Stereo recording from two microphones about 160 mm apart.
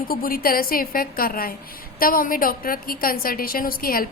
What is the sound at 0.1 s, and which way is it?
A woman's voice, 65° left (ahead or behind).